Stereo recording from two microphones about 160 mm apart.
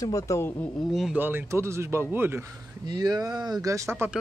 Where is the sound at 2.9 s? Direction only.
25° right (ahead or behind).